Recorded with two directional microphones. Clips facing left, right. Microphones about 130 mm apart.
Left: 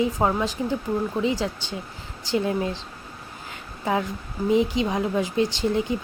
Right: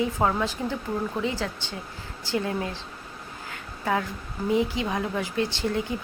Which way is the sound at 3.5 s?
20° left (ahead or behind).